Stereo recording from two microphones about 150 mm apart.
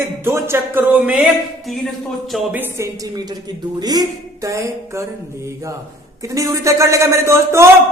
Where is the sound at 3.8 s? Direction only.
25° right (ahead or behind).